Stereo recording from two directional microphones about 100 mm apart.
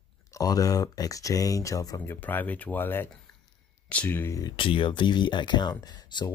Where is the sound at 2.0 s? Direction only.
20° left (ahead or behind).